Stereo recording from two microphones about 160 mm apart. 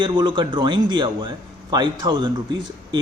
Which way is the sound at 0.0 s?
30° right (ahead or behind).